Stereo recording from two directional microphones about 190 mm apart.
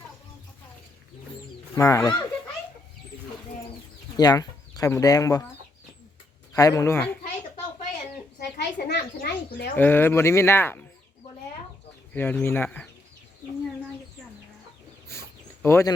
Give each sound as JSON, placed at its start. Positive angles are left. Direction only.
{"t": 1.7, "sound": "speech", "side_deg": 15}
{"t": 4.2, "sound": "speech", "side_deg": 20}
{"t": 6.5, "sound": "speech", "side_deg": 20}
{"t": 8.4, "sound": "a sound", "side_deg": 60}
{"t": 9.7, "sound": "speech", "side_deg": 10}
{"t": 12.1, "sound": "speech", "side_deg": 10}
{"t": 15.6, "sound": "speech", "side_deg": 15}